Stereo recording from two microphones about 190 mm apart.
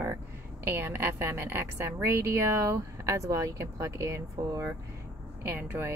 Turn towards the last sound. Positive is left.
turn(degrees=-10)  # may be behind; listen again after turning